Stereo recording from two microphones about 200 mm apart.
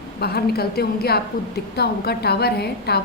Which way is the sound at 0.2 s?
50° left (ahead or behind).